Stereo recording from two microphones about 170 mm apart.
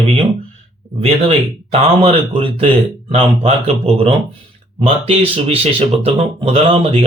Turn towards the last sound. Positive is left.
turn(degrees=-35)  # may be behind; listen again after turning